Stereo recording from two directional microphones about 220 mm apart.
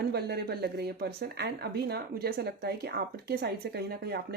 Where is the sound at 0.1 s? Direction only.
45° right (ahead or behind).